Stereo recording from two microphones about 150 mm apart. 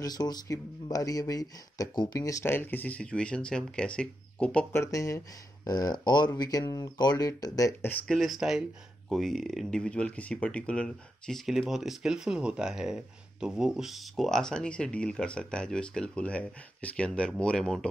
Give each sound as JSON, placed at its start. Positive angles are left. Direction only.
{"t": 0.0, "sound": "speech", "side_deg": 25}
{"t": 4.7, "sound": "speech", "side_deg": 20}
{"t": 7.9, "sound": "speech", "side_deg": 0}